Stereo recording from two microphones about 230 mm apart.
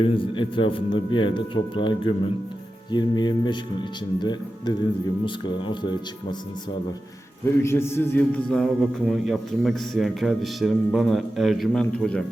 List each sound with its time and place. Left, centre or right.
0.0 s a man's voice: left
7.6 s a man's voice: centre